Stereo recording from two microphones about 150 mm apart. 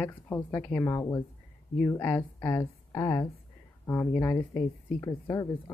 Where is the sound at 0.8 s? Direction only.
25° left (ahead or behind).